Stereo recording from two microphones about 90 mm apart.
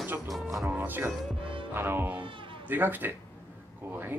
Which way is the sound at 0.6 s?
20° right (ahead or behind).